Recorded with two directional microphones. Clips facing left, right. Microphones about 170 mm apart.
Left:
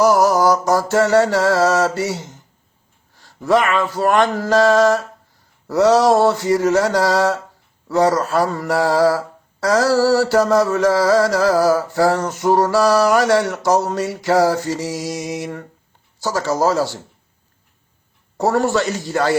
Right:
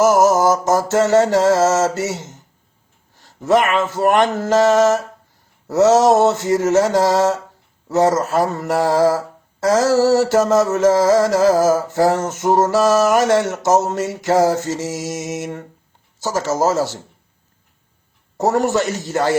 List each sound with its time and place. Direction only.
0.0 s mantra: 20° right (ahead or behind)
18.3 s mantra: 20° right (ahead or behind)